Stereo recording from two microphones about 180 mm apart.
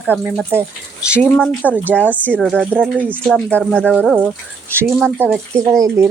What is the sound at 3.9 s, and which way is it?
Speech, 5° right (ahead or behind).